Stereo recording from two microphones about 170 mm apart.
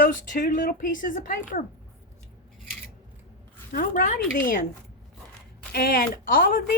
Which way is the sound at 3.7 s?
55° left (ahead or behind).